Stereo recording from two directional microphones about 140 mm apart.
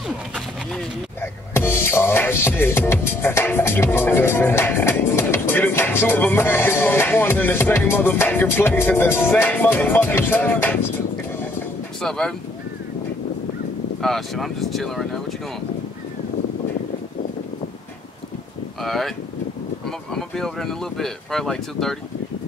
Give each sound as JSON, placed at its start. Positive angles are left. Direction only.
{"t": 1.2, "sound": "music", "side_deg": 15}
{"t": 12.0, "sound": "speech", "side_deg": 5}
{"t": 14.0, "sound": "speech", "side_deg": 0}
{"t": 18.8, "sound": "speech", "side_deg": 0}
{"t": 20.2, "sound": "speech", "side_deg": 5}